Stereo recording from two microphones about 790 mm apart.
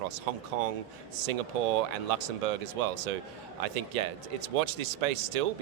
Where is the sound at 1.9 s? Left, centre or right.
Right.